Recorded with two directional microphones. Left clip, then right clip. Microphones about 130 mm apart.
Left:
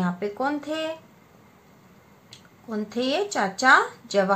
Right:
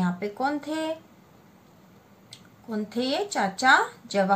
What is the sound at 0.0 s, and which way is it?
Speech, 35° left (ahead or behind).